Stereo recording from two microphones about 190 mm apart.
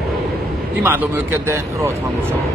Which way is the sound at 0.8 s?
10° right (ahead or behind).